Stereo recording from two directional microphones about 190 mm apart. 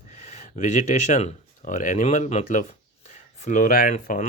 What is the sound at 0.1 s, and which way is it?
Speech, 35° left (ahead or behind).